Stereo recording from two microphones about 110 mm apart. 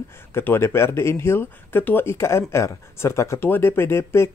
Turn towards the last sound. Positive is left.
turn(degrees=25)  # may be behind; listen again after turning